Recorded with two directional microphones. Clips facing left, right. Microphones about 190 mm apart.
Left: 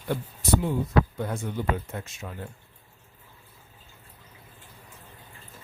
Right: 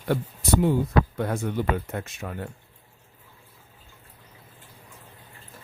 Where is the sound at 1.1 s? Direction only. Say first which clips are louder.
Right 4 dB; 65° right (ahead or behind).